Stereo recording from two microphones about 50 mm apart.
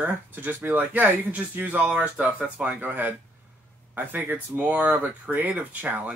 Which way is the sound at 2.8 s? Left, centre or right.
Right.